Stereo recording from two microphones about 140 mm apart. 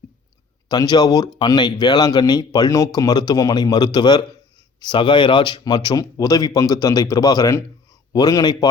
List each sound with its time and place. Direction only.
0.7 s speech: 30° left (ahead or behind)